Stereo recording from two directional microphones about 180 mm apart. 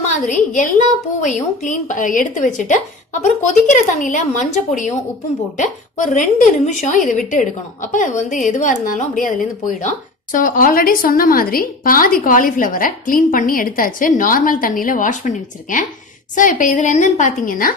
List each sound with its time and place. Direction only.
0.3 s a woman's voice: 45° left (ahead or behind)